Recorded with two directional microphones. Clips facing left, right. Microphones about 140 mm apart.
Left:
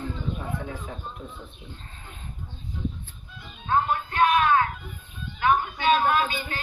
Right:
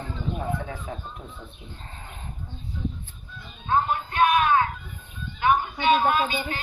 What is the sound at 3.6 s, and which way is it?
Music, 20° right (ahead or behind).